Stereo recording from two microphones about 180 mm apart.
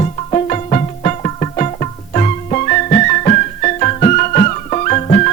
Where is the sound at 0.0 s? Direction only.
35° left (ahead or behind).